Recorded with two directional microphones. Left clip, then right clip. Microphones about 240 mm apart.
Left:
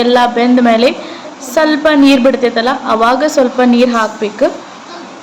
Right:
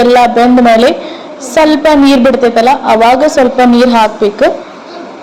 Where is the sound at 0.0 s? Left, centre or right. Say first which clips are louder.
Right 4 dB; centre.